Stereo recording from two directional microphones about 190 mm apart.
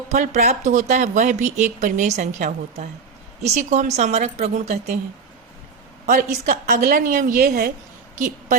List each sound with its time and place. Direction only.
0.1 s speech: 40° right (ahead or behind)
6.5 s a woman's voice: 50° right (ahead or behind)
8.1 s a sound: 40° right (ahead or behind)